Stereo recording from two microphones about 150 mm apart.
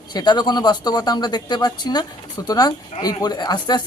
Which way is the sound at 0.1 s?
30° left (ahead or behind).